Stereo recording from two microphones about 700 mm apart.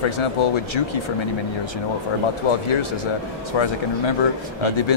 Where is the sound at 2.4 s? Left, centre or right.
Left.